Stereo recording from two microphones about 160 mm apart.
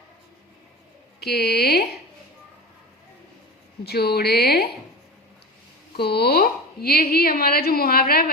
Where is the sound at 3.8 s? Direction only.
85° left.